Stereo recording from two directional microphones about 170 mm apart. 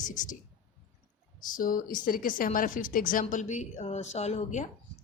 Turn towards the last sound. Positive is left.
turn(degrees=45)  # may be behind; listen again after turning